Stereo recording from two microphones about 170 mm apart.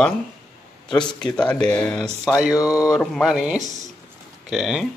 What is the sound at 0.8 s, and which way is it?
Speech, 5° left (ahead or behind).